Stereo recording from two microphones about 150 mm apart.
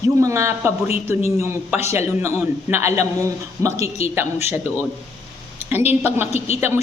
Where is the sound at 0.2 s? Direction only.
20° right (ahead or behind).